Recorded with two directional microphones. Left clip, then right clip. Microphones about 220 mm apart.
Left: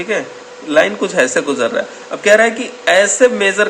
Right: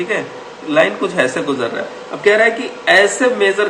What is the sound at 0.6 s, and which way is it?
Speech, 55° left (ahead or behind).